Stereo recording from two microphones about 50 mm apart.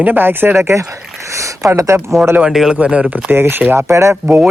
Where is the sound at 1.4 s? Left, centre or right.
Right.